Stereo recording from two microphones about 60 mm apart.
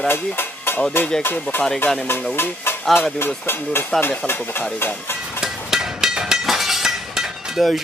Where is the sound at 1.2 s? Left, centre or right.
Left.